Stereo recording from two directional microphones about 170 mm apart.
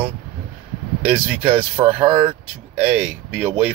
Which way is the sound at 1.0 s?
10° right (ahead or behind).